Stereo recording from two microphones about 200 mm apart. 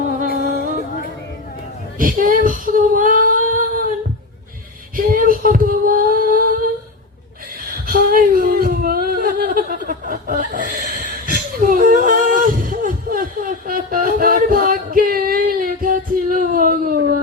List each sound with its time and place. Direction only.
2.0 s female singing: 45° right (ahead or behind)
4.9 s female singing: 45° right (ahead or behind)
7.7 s a sound: 45° right (ahead or behind)